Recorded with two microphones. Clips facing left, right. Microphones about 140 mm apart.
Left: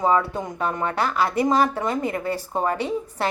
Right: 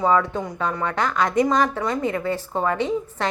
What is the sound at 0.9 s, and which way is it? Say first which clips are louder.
A woman's voice: right 4 dB; 5° left (ahead or behind).